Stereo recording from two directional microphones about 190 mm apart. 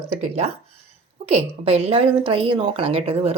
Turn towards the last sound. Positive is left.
turn(degrees=-30)  # may be behind; listen again after turning